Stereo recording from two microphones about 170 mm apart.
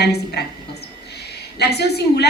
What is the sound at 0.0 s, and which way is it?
Speech, 70° left (ahead or behind).